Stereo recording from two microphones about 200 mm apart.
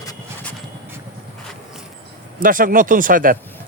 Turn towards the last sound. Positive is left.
turn(degrees=-45)  # may be behind; listen again after turning